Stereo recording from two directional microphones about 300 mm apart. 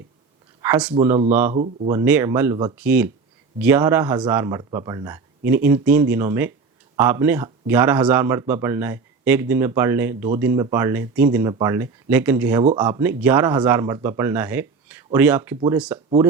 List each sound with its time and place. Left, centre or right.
0.6 s speech: centre
1.5 s speech: right
1.9 s speech: centre